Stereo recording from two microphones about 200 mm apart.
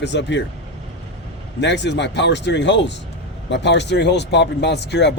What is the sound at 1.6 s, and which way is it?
Speech, 60° left (ahead or behind).